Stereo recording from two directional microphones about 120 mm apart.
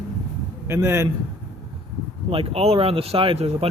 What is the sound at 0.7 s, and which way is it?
Speech, 20° right (ahead or behind).